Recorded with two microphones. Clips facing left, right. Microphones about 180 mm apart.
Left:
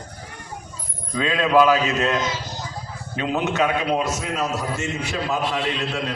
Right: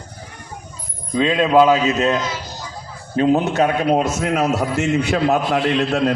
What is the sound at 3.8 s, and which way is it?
A man's voice, 50° right (ahead or behind).